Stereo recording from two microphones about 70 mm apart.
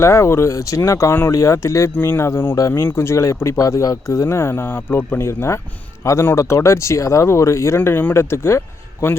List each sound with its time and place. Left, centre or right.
0.0 s speech: left